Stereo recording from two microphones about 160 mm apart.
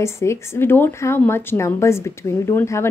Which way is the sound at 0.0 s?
15° left (ahead or behind).